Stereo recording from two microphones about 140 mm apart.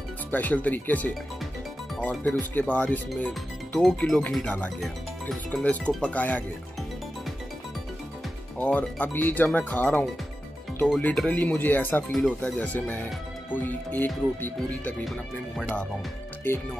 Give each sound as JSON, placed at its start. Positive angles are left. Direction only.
{"t": 0.3, "sound": "speech", "side_deg": 10}
{"t": 8.5, "sound": "speech", "side_deg": 10}
{"t": 15.0, "sound": "speech", "side_deg": 0}